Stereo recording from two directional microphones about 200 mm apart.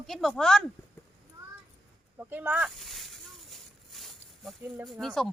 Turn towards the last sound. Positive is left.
turn(degrees=0)  # may be behind; listen again after turning